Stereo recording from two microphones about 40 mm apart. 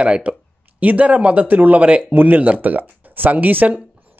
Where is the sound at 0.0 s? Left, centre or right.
Right.